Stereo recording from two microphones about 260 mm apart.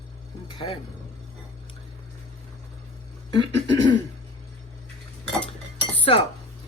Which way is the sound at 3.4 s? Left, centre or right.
Right.